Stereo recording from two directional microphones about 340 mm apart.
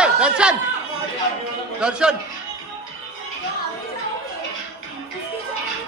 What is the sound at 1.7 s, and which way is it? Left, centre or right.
Speech, centre.